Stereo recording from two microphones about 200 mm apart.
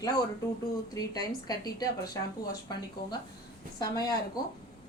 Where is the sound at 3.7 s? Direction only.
20° left (ahead or behind).